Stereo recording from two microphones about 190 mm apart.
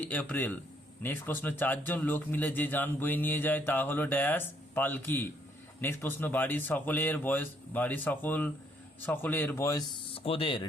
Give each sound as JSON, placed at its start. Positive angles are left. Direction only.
{"t": 0.0, "sound": "a man's voice", "side_deg": 10}
{"t": 10.2, "sound": "speech", "side_deg": 30}